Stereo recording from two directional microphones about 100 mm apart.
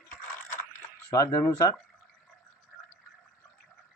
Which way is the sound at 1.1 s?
30° left (ahead or behind).